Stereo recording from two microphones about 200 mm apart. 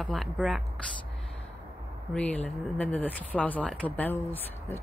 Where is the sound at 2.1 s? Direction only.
5° left (ahead or behind).